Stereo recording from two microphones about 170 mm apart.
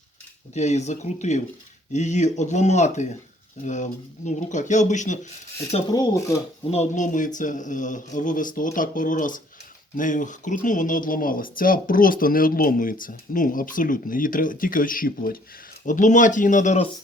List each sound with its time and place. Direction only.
0.5 s speech: 40° left (ahead or behind)
5.9 s speech: 20° left (ahead or behind)
6.7 s speech: 40° left (ahead or behind)